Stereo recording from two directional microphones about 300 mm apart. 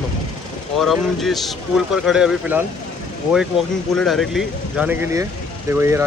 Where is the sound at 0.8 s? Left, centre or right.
Centre.